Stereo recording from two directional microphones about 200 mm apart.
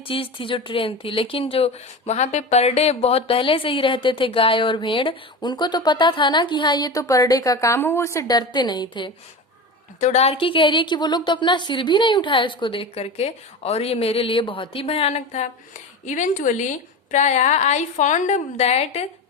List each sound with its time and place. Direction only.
0.0 s speech: 25° left (ahead or behind)
10.0 s a woman's voice: 35° left (ahead or behind)